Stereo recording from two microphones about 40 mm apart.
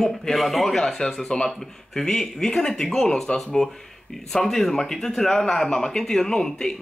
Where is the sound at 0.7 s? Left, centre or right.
Centre.